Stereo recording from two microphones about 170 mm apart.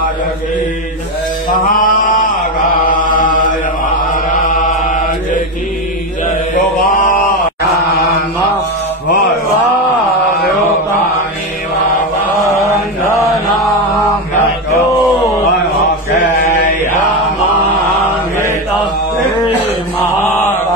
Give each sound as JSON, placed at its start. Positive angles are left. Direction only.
{"t": 1.8, "sound": "chant", "side_deg": 50}
{"t": 4.1, "sound": "mantra", "side_deg": 50}